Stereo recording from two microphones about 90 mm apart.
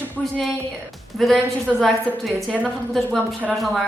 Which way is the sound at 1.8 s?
Centre (ahead or behind).